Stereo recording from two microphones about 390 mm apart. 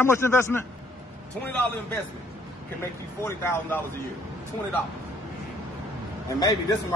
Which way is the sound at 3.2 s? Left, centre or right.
Centre.